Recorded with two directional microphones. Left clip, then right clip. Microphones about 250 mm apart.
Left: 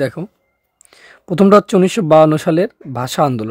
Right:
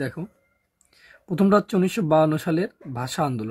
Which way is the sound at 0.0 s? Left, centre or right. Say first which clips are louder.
Left 11 dB; left.